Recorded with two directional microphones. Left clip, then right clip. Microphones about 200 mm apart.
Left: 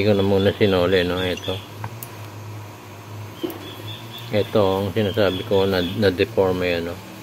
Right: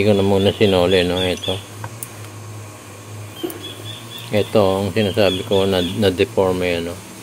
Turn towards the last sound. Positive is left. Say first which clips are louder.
# right 2 dB
turn(degrees=-15)  # may be behind; listen again after turning